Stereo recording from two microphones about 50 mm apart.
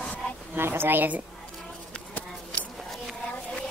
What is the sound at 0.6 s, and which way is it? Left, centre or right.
Speech, right.